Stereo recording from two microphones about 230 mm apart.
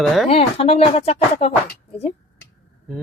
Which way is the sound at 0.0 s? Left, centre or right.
Centre.